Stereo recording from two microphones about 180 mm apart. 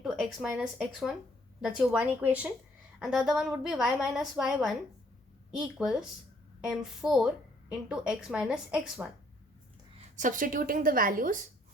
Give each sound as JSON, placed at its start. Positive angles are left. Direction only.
{"t": 0.0, "sound": "a woman's voice", "side_deg": 0}
{"t": 10.0, "sound": "speech", "side_deg": -45}